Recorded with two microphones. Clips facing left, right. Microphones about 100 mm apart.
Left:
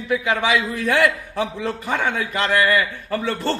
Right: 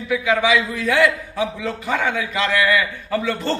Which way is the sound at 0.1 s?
50° left (ahead or behind).